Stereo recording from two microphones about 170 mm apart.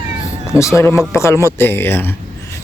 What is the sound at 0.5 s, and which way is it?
Speech, 15° left (ahead or behind).